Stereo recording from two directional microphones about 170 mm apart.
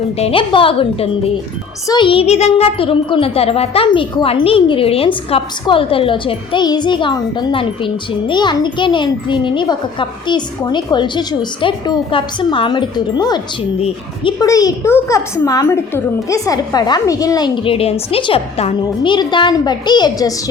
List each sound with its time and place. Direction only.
0.2 s a child's voice: 30° left (ahead or behind)
13.7 s a child's voice: 35° left (ahead or behind)
14.4 s a child's voice: 20° left (ahead or behind)